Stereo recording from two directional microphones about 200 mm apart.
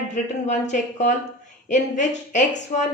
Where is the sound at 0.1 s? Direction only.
35° left (ahead or behind).